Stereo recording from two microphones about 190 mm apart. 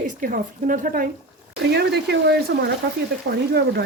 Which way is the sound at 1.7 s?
60° right (ahead or behind).